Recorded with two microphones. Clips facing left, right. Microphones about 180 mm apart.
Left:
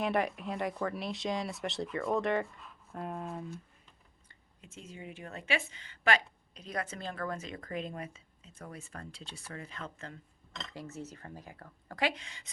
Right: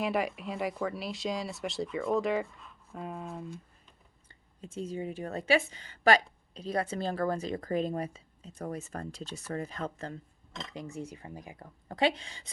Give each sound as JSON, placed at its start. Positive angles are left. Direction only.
{"t": 0.0, "sound": "speech", "side_deg": 0}
{"t": 4.3, "sound": "a woman's voice", "side_deg": -35}
{"t": 10.7, "sound": "speech", "side_deg": -15}